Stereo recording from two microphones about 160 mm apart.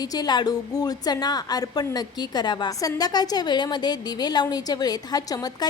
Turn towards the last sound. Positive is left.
turn(degrees=25)  # may be behind; listen again after turning